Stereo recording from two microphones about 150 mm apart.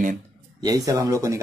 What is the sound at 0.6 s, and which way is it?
Speech, 25° right (ahead or behind).